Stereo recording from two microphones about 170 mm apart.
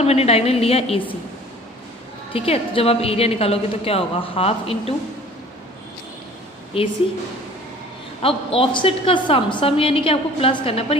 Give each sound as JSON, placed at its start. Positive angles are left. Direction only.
{"t": 0.0, "sound": "a woman's voice", "side_deg": 35}
{"t": 2.3, "sound": "a woman's voice", "side_deg": 35}
{"t": 6.7, "sound": "a woman's voice", "side_deg": 30}
{"t": 8.2, "sound": "a woman's voice", "side_deg": 35}